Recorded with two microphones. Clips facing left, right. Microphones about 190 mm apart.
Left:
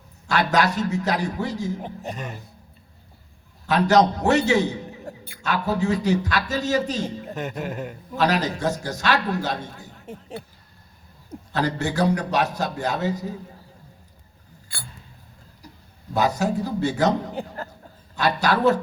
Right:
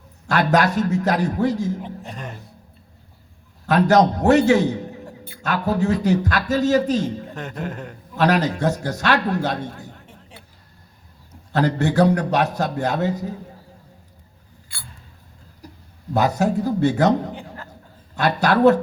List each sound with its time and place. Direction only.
0.3 s speech: 55° right (ahead or behind)
2.0 s speech: 5° left (ahead or behind)
3.7 s speech: 55° right (ahead or behind)
7.3 s speech: 10° left (ahead or behind)
8.2 s speech: 60° right (ahead or behind)
10.1 s a sound: 40° left (ahead or behind)
11.5 s speech: 60° right (ahead or behind)
16.1 s speech: 60° right (ahead or behind)
17.6 s a sound: 40° left (ahead or behind)
18.2 s speech: 60° right (ahead or behind)